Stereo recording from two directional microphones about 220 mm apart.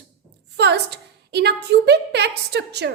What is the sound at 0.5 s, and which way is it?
A woman's voice, 50° right (ahead or behind).